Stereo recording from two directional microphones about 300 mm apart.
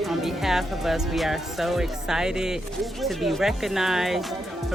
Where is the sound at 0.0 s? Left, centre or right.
Centre.